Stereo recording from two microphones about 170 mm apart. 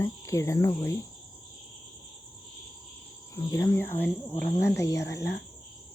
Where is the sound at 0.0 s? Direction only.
20° left (ahead or behind).